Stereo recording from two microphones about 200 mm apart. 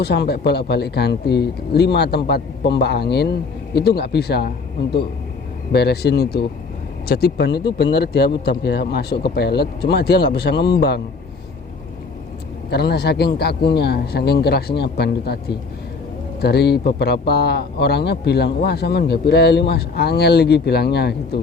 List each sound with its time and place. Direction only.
0.0 s a man's voice: 55° left (ahead or behind)
12.7 s a man's voice: 55° left (ahead or behind)